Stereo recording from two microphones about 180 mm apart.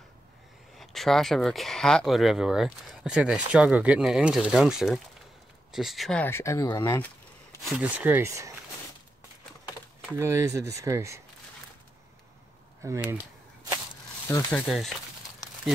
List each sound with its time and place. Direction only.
0.7 s speech: centre (ahead or behind)
7.7 s speech: 10° right (ahead or behind)
10.1 s speech: 15° right (ahead or behind)
12.8 s speech: 10° right (ahead or behind)
14.2 s speech: 10° left (ahead or behind)